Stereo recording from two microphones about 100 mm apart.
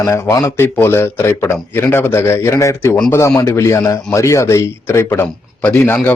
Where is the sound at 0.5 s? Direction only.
25° left (ahead or behind).